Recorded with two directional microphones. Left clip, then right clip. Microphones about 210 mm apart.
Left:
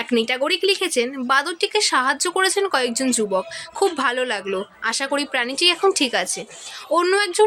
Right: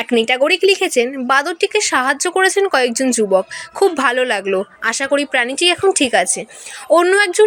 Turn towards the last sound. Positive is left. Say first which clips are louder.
# right 7 dB
turn(degrees=-20)  # may be behind; listen again after turning